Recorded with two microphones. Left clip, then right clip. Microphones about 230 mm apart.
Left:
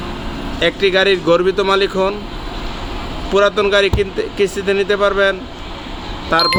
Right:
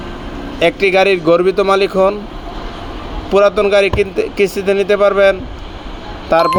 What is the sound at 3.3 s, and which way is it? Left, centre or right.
Speech, centre.